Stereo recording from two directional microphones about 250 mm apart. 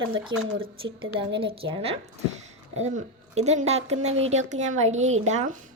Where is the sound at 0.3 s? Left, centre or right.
Right.